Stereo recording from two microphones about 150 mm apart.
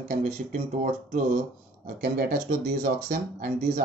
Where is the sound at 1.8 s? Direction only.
80° right.